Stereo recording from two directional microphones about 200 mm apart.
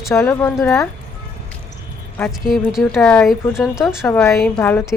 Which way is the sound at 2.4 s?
Centre (ahead or behind).